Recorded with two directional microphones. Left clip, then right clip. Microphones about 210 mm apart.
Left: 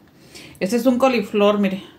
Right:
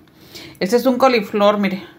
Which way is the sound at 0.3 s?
20° right (ahead or behind).